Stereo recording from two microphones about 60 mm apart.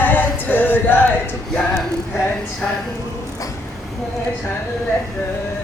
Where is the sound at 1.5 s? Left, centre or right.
Centre.